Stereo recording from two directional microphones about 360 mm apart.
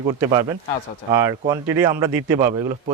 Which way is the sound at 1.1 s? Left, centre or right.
Centre.